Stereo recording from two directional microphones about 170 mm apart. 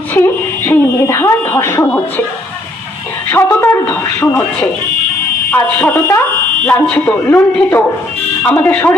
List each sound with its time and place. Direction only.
0.1 s speech: 15° left (ahead or behind)
3.2 s speech: 15° left (ahead or behind)